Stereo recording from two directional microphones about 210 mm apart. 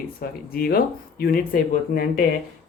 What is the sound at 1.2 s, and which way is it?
Speech, 45° left (ahead or behind).